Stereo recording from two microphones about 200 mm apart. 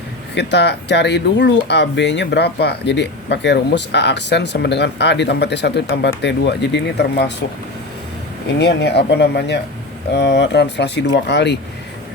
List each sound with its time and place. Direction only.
0.3 s speech: 55° left (ahead or behind)
8.5 s speech: 55° left (ahead or behind)